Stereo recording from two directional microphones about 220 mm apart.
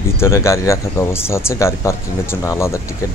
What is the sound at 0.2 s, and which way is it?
Speech, 15° left (ahead or behind).